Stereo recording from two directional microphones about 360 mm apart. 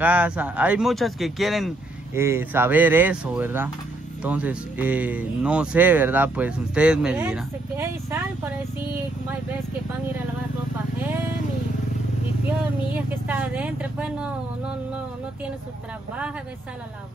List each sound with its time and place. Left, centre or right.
0.0 s speech: centre
12.9 s speech: centre